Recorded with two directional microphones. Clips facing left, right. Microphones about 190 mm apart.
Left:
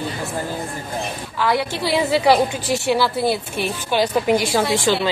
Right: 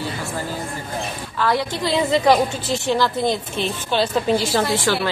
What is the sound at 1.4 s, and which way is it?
A woman's voice, 10° left (ahead or behind).